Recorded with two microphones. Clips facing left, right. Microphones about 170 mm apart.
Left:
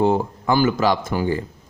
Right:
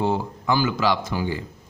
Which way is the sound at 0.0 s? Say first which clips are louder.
Left 5 dB; 50° left (ahead or behind).